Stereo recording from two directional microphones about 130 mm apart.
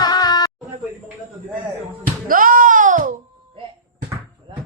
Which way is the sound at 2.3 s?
90° right.